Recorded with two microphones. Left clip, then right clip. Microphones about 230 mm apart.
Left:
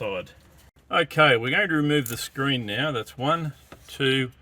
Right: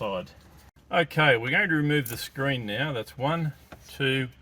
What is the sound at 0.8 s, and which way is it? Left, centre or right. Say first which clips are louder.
Speech: left 3 dB; left.